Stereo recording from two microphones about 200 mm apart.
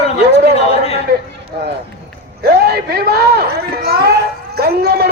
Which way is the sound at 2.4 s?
50° right (ahead or behind).